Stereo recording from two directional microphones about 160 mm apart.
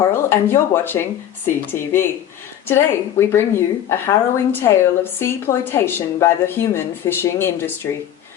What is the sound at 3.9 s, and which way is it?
A woman's voice, 15° left (ahead or behind).